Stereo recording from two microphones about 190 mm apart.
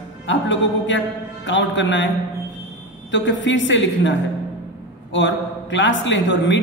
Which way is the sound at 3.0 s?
75° left (ahead or behind).